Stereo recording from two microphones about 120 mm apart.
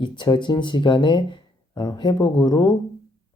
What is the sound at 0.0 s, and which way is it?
Speech, 40° left (ahead or behind).